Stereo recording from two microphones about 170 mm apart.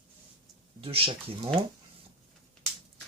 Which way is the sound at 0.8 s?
35° right (ahead or behind).